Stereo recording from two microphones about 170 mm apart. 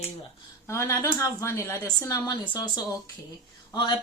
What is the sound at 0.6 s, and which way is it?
A woman's voice, 15° left (ahead or behind).